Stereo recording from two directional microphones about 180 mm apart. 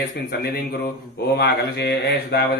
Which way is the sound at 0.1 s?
60° left (ahead or behind).